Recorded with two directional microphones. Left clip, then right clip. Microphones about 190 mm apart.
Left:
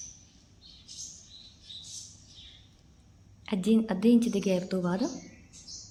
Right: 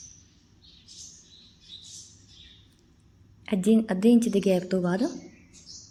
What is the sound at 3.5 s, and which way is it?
A woman's voice, 15° right (ahead or behind).